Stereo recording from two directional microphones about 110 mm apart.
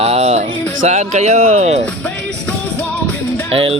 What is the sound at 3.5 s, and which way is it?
Speech, 60° right (ahead or behind).